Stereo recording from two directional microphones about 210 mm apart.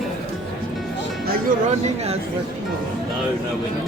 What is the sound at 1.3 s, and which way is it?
Speech, 40° right (ahead or behind).